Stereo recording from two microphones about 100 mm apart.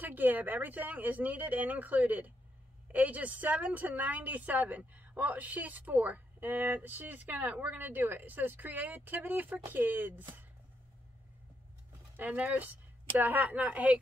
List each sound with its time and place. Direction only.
0.0 s a woman's voice: 20° right (ahead or behind)
12.2 s a woman's voice: 15° right (ahead or behind)